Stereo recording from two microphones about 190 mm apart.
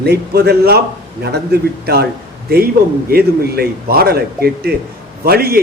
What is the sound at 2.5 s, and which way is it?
A man's voice, 55° right (ahead or behind).